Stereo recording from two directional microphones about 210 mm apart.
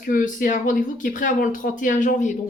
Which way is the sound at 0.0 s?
40° left (ahead or behind).